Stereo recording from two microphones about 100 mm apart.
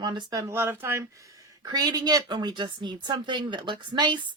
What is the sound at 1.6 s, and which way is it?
Speech, 40° right (ahead or behind).